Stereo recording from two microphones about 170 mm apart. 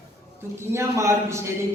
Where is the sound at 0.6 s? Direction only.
15° right (ahead or behind).